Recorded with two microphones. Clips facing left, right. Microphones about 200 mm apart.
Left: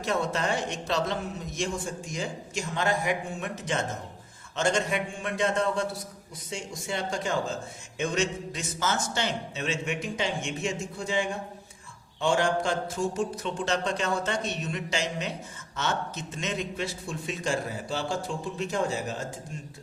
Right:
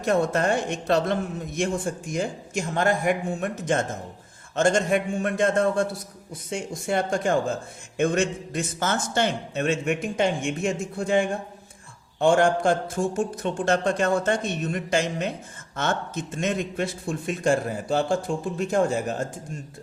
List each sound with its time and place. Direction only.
0.0 s a man's voice: 50° right (ahead or behind)